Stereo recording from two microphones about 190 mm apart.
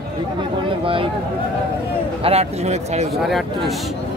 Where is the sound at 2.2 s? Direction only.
30° right (ahead or behind).